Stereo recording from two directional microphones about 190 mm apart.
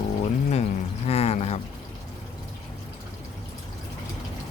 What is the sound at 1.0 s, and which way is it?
Pour, 35° left (ahead or behind).